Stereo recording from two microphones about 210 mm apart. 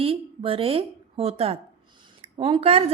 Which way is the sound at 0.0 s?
25° right (ahead or behind).